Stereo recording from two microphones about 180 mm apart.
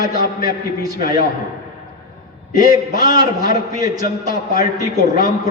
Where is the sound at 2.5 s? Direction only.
20° right (ahead or behind).